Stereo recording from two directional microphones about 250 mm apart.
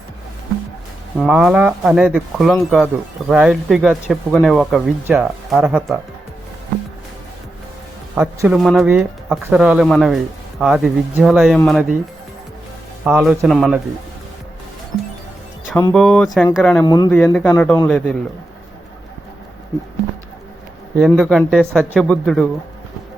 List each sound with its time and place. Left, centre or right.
1.1 s speech: centre
8.1 s speech: centre
13.1 s speech: centre
15.8 s speech: centre
16.8 s speech: centre
21.1 s speech: centre